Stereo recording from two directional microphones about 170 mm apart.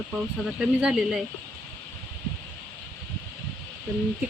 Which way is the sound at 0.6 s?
5° right (ahead or behind).